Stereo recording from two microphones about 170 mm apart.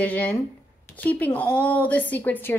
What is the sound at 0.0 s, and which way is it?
A woman's voice, 10° left (ahead or behind).